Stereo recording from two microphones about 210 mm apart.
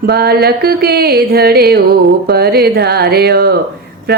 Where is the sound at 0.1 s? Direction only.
50° right (ahead or behind).